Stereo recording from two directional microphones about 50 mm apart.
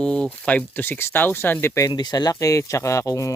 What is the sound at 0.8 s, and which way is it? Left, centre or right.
Speech, left.